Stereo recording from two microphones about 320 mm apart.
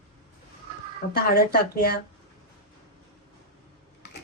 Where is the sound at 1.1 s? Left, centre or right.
Left.